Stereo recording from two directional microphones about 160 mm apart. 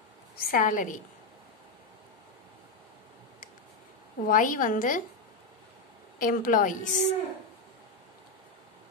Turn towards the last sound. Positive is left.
turn(degrees=50)  # may be behind; listen again after turning